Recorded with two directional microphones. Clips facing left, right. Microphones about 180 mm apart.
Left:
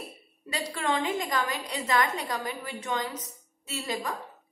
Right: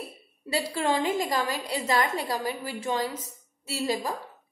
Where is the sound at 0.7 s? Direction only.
30° right (ahead or behind).